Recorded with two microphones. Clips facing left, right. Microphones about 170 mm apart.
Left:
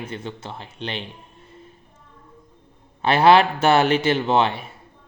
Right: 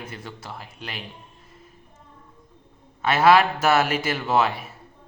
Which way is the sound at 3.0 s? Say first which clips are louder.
Left 2 dB; 30° left (ahead or behind).